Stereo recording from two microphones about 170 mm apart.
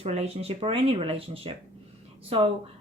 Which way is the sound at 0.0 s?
35° right (ahead or behind).